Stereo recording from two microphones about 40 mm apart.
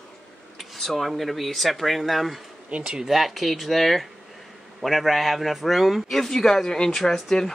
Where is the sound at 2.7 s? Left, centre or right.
Right.